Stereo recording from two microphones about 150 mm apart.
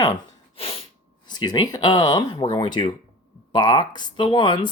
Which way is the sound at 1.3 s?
30° left (ahead or behind).